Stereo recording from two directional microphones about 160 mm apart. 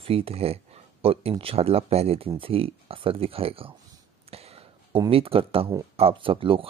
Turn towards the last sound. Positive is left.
turn(degrees=-35)  # may be behind; listen again after turning